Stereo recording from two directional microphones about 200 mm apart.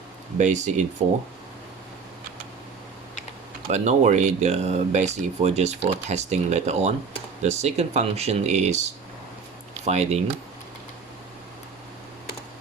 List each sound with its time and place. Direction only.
0.3 s speech: 35° right (ahead or behind)
3.7 s speech: 35° right (ahead or behind)